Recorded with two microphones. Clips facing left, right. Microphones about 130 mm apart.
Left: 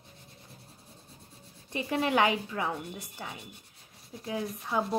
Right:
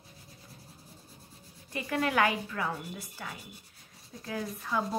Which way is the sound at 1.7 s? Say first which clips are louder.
Left 2 dB; 25° left (ahead or behind).